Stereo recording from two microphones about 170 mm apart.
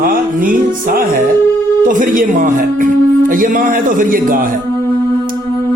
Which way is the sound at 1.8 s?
50° right (ahead or behind).